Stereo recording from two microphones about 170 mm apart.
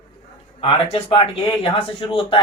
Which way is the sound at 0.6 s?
35° left (ahead or behind).